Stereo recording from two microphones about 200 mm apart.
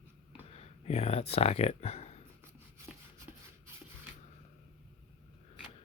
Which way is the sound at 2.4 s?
15° right (ahead or behind).